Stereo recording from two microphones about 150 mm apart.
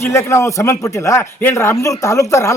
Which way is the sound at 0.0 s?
20° left (ahead or behind).